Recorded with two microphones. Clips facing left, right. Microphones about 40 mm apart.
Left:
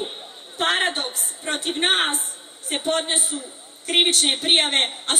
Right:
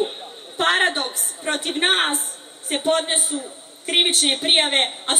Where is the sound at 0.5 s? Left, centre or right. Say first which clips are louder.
Right 3 dB; centre.